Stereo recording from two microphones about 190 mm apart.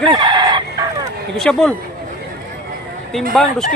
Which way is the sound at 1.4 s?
5° left (ahead or behind).